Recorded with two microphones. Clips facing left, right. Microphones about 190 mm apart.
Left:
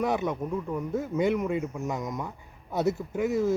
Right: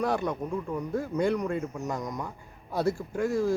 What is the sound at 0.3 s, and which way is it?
Speech, centre (ahead or behind).